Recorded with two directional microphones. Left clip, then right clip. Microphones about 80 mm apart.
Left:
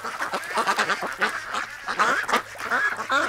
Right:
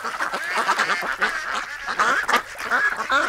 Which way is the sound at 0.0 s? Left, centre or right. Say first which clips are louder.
Right 3 dB; left.